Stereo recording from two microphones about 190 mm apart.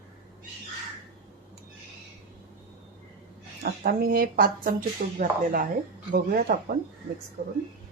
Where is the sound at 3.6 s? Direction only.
50° right (ahead or behind).